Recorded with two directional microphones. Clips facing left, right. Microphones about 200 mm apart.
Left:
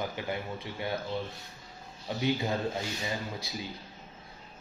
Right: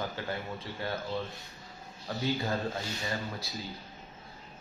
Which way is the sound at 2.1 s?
15° left (ahead or behind).